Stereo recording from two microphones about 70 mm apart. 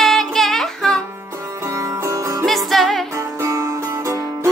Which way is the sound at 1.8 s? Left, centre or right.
Right.